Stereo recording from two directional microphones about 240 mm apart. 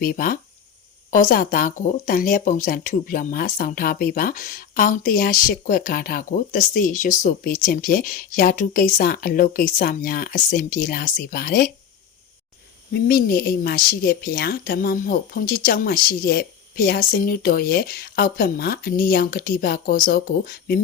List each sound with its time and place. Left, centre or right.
0.0 s speech: left
12.9 s speech: left